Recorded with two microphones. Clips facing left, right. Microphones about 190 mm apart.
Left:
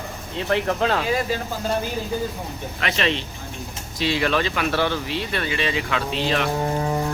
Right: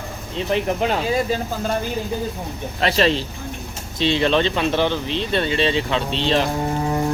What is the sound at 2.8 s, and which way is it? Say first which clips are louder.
Speech: right 6 dB; 35° right (ahead or behind).